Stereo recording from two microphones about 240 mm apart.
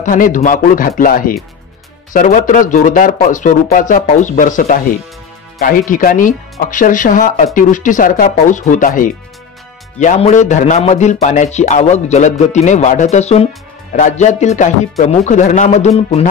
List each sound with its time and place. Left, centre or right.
0.0 s a man's voice: left